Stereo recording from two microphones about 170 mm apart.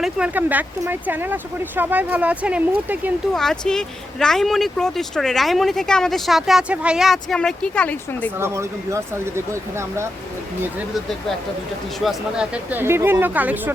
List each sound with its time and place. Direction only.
0.0 s speech: 10° right (ahead or behind)
3.3 s speech: 5° left (ahead or behind)
8.4 s speech: 15° right (ahead or behind)
11.9 s speech: centre (ahead or behind)
12.7 s speech: 15° right (ahead or behind)